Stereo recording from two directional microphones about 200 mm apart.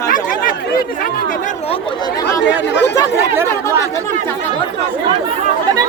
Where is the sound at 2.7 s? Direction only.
60° left (ahead or behind).